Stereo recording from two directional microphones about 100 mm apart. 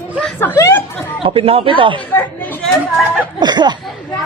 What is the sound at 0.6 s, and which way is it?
Speech, 30° left (ahead or behind).